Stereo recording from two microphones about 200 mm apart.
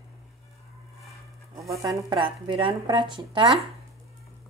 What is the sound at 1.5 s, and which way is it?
A woman's voice, 15° right (ahead or behind).